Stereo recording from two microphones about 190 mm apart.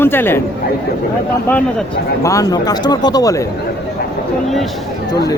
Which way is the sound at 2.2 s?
15° left (ahead or behind).